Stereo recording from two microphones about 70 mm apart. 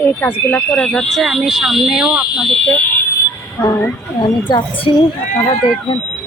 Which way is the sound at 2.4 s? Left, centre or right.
Centre.